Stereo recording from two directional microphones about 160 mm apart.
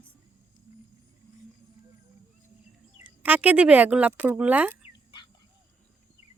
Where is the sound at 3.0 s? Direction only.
10° right (ahead or behind).